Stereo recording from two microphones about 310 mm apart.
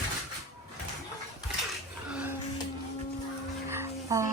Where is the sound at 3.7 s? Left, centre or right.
Centre.